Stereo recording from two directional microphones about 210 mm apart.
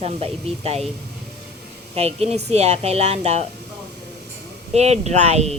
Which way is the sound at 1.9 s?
30° right (ahead or behind).